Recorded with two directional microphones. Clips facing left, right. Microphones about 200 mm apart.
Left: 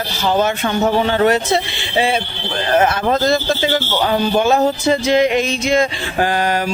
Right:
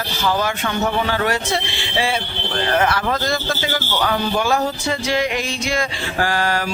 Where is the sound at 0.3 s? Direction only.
25° left (ahead or behind).